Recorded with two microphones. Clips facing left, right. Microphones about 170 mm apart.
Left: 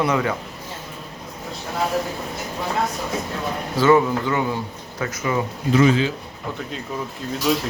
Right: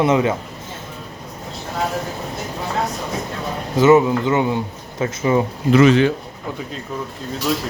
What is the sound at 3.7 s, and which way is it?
A man's voice, 20° right (ahead or behind).